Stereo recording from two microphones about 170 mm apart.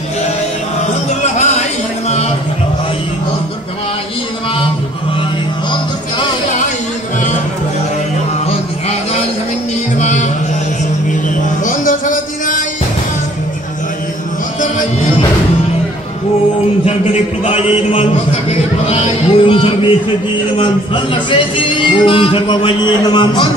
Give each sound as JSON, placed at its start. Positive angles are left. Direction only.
{"t": 1.2, "sound": "music", "side_deg": 45}
{"t": 9.9, "sound": "music", "side_deg": 45}
{"t": 11.6, "sound": "a sound", "side_deg": 50}
{"t": 16.8, "sound": "a man's voice", "side_deg": 40}
{"t": 18.5, "sound": "a sound", "side_deg": 35}
{"t": 20.5, "sound": "speech", "side_deg": 30}